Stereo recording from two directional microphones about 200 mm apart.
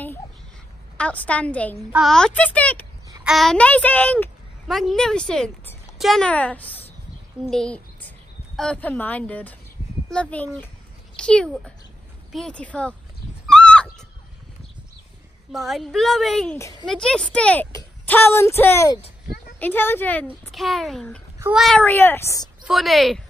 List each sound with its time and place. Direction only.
0.9 s a child's voice: 5° left (ahead or behind)
13.5 s neigh: 5° left (ahead or behind)
15.5 s a woman's voice: centre (ahead or behind)
16.5 s speech: 15° left (ahead or behind)
16.8 s a woman's voice: 5° left (ahead or behind)
22.7 s a woman's voice: centre (ahead or behind)